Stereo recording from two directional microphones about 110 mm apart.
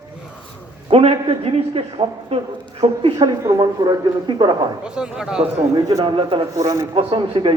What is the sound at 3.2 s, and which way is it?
Speech, 30° right (ahead or behind).